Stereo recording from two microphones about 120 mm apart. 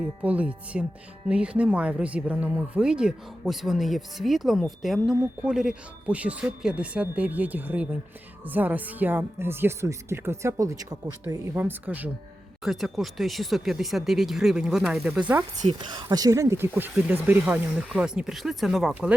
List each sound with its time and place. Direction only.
0.2 s speech: 10° right (ahead or behind); by 11.3 s 30° right (ahead or behind)
11.5 s speech: 15° right (ahead or behind)
12.6 s speech: centre (ahead or behind)
15.3 s speech: 20° right (ahead or behind)
15.8 s speech: 40° right (ahead or behind); by 18.9 s centre (ahead or behind)